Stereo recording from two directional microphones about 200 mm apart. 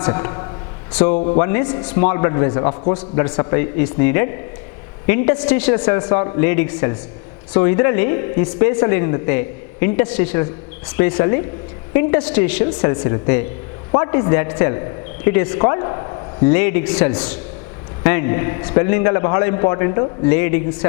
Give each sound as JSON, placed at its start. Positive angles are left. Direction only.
{"t": 0.1, "sound": "a man's voice", "side_deg": 20}
{"t": 1.1, "sound": "speech", "side_deg": 30}
{"t": 1.4, "sound": "speech", "side_deg": 15}
{"t": 2.9, "sound": "speech", "side_deg": 10}
{"t": 5.7, "sound": "a man's voice", "side_deg": 20}
{"t": 16.5, "sound": "speech", "side_deg": 15}